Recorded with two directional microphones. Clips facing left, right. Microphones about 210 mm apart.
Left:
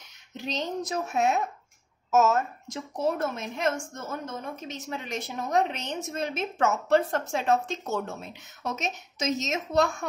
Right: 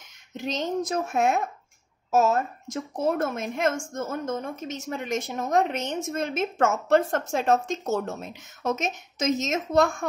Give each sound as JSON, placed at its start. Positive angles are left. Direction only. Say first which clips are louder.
{"t": 0.5, "sound": "a woman's voice", "louder": "right 4 dB", "side_deg": -50}
{"t": 2.0, "sound": "speech", "louder": "right 1 dB", "side_deg": -35}
{"t": 3.0, "sound": "a woman's voice", "louder": "right 2 dB", "side_deg": -50}